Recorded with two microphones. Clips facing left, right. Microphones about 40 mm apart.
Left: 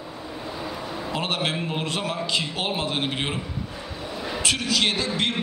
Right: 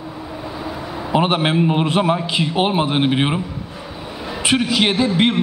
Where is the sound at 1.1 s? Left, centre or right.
Right.